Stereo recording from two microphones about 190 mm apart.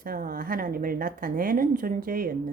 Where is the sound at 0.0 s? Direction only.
50° right (ahead or behind).